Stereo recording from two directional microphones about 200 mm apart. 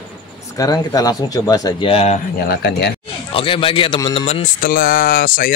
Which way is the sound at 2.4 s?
55° left (ahead or behind).